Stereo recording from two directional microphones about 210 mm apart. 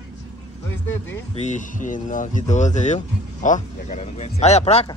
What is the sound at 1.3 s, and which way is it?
Speech, 35° left (ahead or behind).